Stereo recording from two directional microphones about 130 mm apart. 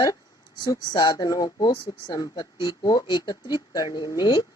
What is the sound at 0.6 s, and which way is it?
Speech, 30° left (ahead or behind).